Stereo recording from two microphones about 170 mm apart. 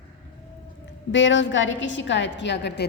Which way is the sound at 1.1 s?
90° left.